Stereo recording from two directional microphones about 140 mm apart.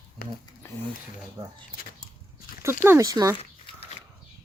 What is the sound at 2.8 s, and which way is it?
Speech, 20° right (ahead or behind).